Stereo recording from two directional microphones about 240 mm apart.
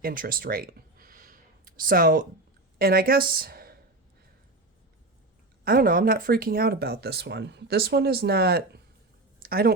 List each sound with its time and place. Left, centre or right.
0.0 s a sound: right
2.7 s a woman's voice: right
5.6 s speech: right